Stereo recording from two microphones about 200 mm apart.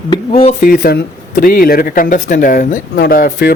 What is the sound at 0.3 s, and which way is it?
Speech, 30° left (ahead or behind).